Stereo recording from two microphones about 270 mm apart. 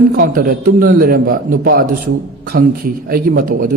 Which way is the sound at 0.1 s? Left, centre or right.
Right.